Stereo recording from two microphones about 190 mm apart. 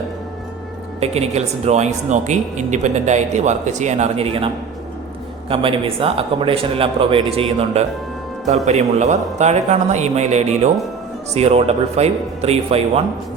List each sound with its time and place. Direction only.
0.9 s speech: 35° right (ahead or behind)
5.5 s a man's voice: 30° right (ahead or behind)